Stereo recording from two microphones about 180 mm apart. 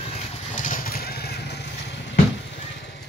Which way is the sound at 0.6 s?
45° left (ahead or behind).